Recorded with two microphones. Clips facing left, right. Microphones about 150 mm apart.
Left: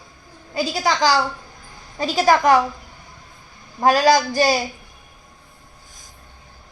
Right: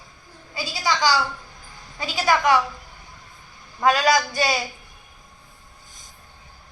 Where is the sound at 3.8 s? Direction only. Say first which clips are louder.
Left 4 dB; 35° left (ahead or behind).